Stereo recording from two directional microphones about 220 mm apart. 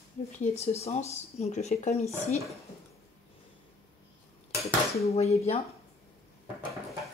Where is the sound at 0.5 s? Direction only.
30° left (ahead or behind).